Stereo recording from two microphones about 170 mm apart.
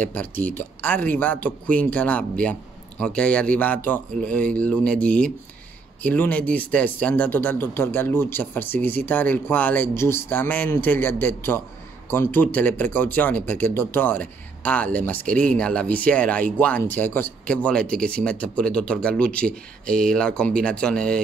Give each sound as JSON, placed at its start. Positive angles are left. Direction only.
{"t": 0.0, "sound": "speech", "side_deg": 10}